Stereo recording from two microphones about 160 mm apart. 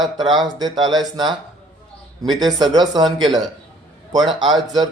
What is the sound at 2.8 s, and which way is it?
Speech, 25° right (ahead or behind).